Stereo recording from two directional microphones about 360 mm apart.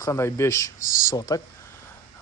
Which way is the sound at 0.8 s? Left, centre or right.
Left.